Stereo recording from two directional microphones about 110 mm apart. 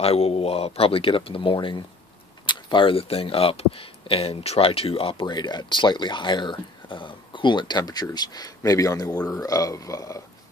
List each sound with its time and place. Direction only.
0.0 s speech: 65° left (ahead or behind); by 10.2 s 30° left (ahead or behind)